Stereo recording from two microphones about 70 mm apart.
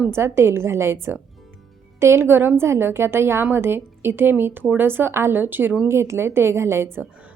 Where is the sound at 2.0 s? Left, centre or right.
Right.